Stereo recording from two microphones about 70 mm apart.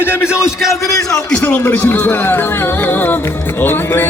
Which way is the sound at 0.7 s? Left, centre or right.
Left.